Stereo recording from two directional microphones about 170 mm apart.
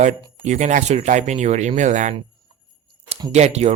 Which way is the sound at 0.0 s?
45° right (ahead or behind).